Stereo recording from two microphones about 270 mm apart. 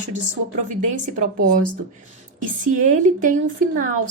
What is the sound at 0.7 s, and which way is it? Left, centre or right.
A woman's voice, right.